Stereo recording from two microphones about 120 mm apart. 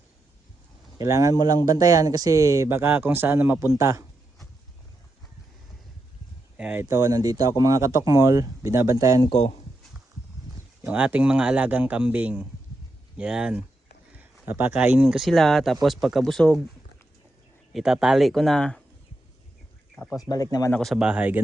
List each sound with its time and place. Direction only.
0.9 s speech: 30° right (ahead or behind)
6.6 s speech: 10° right (ahead or behind)
6.8 s speech: 25° right (ahead or behind)
10.8 s speech: 10° right (ahead or behind)
15.1 s speech: centre (ahead or behind)
17.7 s speech: 5° right (ahead or behind)
20.1 s speech: 30° left (ahead or behind)
20.7 s speech: centre (ahead or behind)